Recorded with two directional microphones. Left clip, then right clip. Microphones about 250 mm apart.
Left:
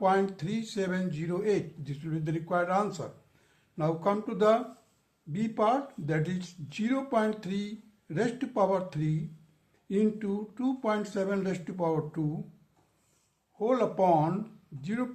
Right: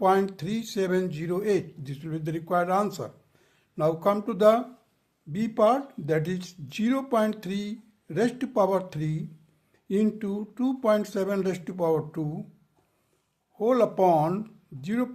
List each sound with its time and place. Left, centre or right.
0.0 s speech: right
13.6 s speech: right